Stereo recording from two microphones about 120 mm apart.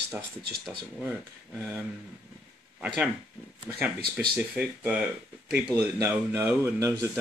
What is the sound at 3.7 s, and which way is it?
Speech, 10° right (ahead or behind).